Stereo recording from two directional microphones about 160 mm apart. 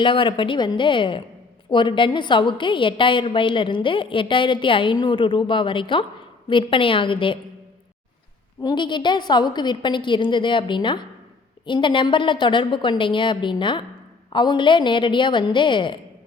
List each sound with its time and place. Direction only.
0.0 s a woman's voice: 30° left (ahead or behind)
8.6 s a woman's voice: 30° left (ahead or behind)